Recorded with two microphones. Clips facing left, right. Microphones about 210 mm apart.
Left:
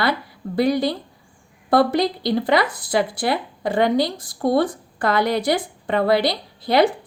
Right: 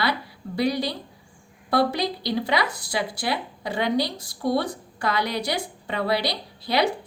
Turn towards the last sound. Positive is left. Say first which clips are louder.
# left 6 dB
turn(degrees=50)  # may be behind; listen again after turning